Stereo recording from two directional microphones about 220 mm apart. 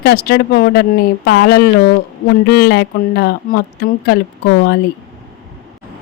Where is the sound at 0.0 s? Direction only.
45° left (ahead or behind).